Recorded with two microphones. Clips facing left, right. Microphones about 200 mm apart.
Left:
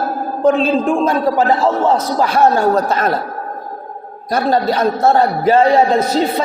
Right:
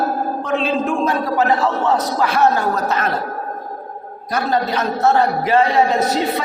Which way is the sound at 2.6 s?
30° left (ahead or behind).